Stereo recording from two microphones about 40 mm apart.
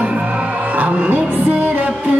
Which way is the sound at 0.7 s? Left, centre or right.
Right.